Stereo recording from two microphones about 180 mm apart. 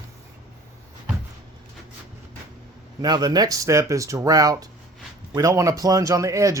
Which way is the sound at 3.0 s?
20° right (ahead or behind).